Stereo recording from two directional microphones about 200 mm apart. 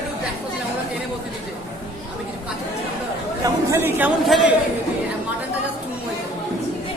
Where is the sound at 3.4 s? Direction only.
15° right (ahead or behind).